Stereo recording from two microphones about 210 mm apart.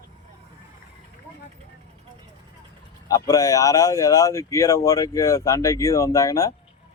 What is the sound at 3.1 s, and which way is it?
Speech, 15° left (ahead or behind).